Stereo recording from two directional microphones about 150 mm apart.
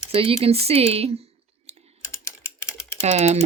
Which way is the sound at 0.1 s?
40° right (ahead or behind).